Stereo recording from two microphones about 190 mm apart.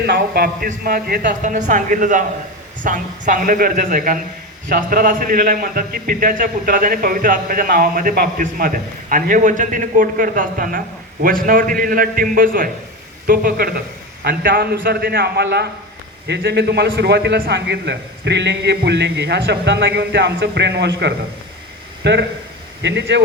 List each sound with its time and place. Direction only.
0.0 s a man's voice: 55° right (ahead or behind)
1.4 s a man's voice: 40° right (ahead or behind); by 23.2 s 70° right (ahead or behind)